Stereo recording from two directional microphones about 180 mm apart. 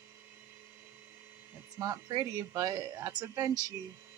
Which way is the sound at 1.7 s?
20° right (ahead or behind).